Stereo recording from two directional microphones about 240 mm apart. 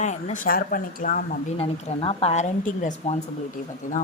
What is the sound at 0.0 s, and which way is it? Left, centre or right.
Speech, left.